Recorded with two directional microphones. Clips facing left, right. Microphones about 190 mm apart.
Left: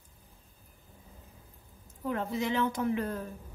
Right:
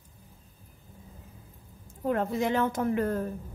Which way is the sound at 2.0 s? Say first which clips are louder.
Right 4 dB; 50° right (ahead or behind).